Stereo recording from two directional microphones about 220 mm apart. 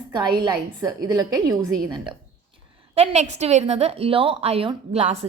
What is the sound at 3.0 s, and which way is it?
A woman's voice, 30° right (ahead or behind).